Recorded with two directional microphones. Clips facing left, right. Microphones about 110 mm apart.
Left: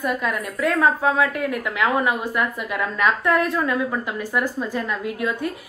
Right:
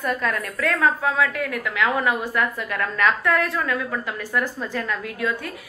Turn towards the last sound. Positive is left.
turn(degrees=20)  # may be behind; listen again after turning